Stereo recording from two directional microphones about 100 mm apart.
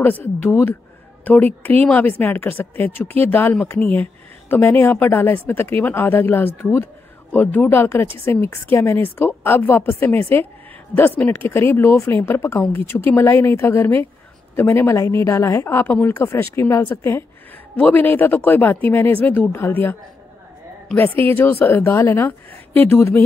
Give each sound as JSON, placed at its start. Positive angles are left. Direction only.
{"t": 0.0, "sound": "speech", "side_deg": 20}
{"t": 21.2, "sound": "speech", "side_deg": 20}